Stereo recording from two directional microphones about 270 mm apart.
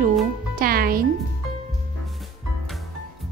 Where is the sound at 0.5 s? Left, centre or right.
Right.